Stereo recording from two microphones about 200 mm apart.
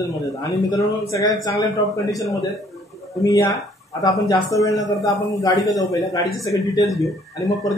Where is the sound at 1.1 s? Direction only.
20° left (ahead or behind).